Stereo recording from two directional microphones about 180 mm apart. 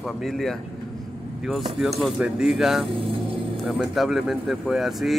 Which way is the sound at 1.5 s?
Centre (ahead or behind).